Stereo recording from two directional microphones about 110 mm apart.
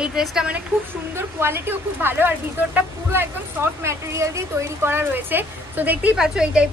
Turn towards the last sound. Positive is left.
turn(degrees=-10)  # may be behind; listen again after turning